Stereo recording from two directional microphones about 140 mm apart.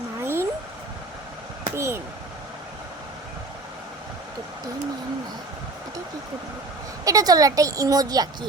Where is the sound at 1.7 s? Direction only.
20° right (ahead or behind).